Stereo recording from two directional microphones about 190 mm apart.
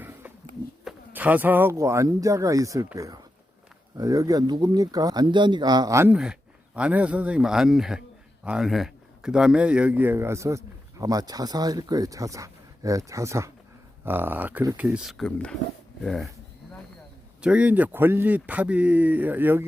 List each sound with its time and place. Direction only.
0.0 s a sound: 10° right (ahead or behind)
1.1 s speech: 10° right (ahead or behind)
17.4 s speech: 5° right (ahead or behind)